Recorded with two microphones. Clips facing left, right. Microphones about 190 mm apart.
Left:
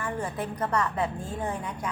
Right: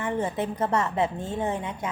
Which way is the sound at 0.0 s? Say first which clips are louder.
Right 4 dB; 25° right (ahead or behind).